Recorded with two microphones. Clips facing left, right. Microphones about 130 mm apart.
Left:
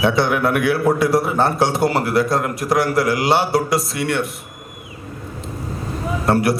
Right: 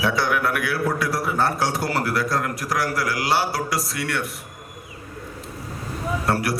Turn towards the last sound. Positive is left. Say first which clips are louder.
# left 6 dB
turn(degrees=25)  # may be behind; listen again after turning